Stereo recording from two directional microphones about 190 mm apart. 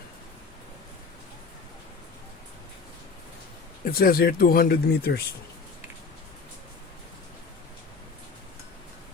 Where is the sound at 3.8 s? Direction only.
50° left (ahead or behind).